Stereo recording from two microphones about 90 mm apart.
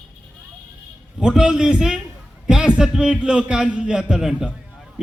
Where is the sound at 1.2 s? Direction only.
10° right (ahead or behind).